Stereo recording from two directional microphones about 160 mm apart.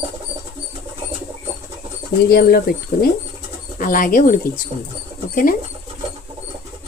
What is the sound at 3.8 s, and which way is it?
Speech, 60° left (ahead or behind).